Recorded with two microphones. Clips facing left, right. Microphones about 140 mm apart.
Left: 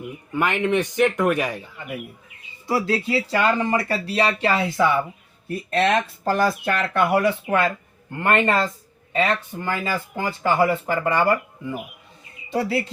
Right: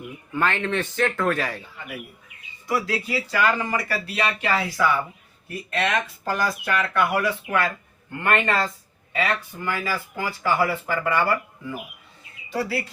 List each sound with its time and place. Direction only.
0.3 s a man's voice: 15° left (ahead or behind)
2.6 s speech: 30° left (ahead or behind)